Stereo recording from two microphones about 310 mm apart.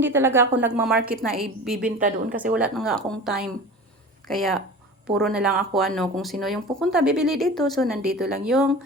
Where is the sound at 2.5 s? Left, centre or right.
Centre.